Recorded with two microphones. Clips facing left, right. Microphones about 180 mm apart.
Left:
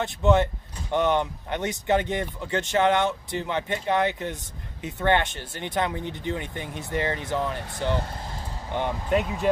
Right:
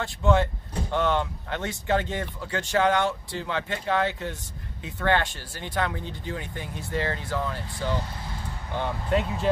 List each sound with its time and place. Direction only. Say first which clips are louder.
0.0 s speech: left 2 dB; 20° left (ahead or behind)
8.7 s speech: left 2 dB; 15° left (ahead or behind)